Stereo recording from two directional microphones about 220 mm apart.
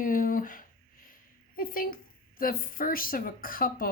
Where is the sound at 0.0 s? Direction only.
40° left (ahead or behind).